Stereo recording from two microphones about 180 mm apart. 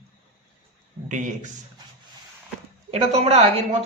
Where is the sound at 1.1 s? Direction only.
45° right (ahead or behind).